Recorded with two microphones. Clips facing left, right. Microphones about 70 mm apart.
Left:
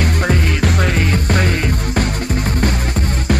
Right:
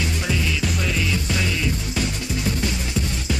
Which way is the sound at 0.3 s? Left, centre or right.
Left.